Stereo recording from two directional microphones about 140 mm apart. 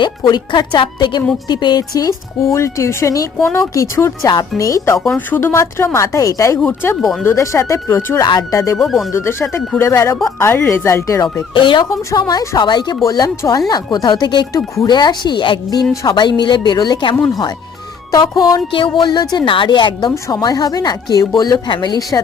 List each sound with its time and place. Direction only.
0.0 s a woman's voice: 35° left (ahead or behind)
4.9 s a woman's voice: 5° left (ahead or behind); by 6.6 s 25° left (ahead or behind)
6.6 s speech: 10° left (ahead or behind)
7.3 s a woman's voice: 20° left (ahead or behind)
8.8 s speech: centre (ahead or behind)
9.1 s a woman's voice: 20° left (ahead or behind)
11.5 s a woman's voice: 35° left (ahead or behind)